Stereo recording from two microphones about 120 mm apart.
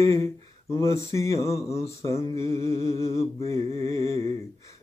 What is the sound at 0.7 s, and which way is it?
Mantra, 25° left (ahead or behind).